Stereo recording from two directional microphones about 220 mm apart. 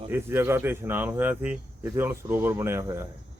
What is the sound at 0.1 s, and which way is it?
Speech, 10° right (ahead or behind).